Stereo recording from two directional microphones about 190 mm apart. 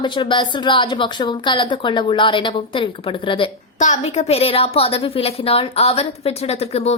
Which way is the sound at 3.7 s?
40° left (ahead or behind).